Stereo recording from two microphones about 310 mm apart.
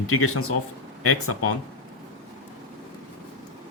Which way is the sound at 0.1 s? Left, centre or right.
Left.